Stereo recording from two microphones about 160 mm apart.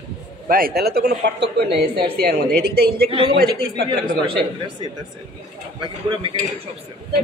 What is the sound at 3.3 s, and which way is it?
Speech, 85° right.